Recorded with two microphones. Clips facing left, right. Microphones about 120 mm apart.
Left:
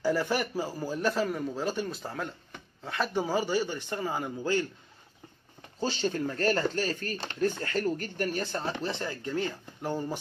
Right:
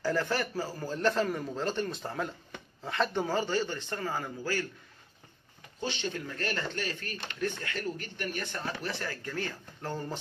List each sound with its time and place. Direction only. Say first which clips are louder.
0.0 s a man's voice: left 2 dB; 10° left (ahead or behind)
5.8 s speech: left 5 dB; 35° left (ahead or behind); by 10.1 s 15° left (ahead or behind)